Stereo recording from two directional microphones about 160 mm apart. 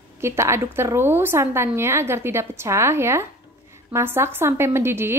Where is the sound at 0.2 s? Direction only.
15° right (ahead or behind).